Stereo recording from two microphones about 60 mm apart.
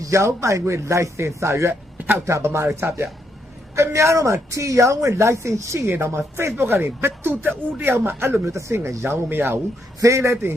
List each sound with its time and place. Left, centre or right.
0.0 s a man's voice: right
9.3 s speech: right
10.0 s a man's voice: right